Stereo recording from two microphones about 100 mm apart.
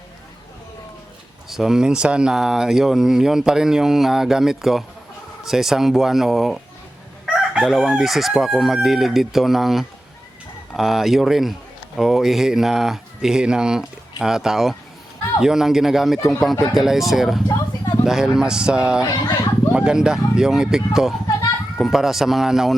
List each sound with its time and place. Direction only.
1.5 s speech: 5° right (ahead or behind)
19.0 s speech: 40° left (ahead or behind)
19.7 s speech: 10° right (ahead or behind)